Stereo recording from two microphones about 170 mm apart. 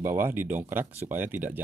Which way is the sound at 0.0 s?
15° right (ahead or behind).